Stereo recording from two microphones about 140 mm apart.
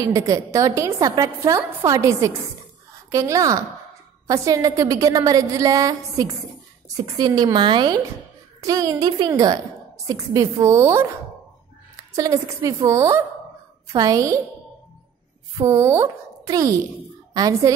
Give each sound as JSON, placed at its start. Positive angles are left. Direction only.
{"t": 0.0, "sound": "a woman's voice", "side_deg": -25}
{"t": 15.6, "sound": "a woman's voice", "side_deg": -20}